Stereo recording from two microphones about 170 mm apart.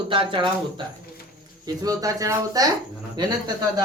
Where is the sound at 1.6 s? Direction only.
20° right (ahead or behind).